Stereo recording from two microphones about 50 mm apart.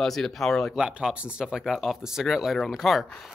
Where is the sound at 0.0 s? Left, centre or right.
Centre.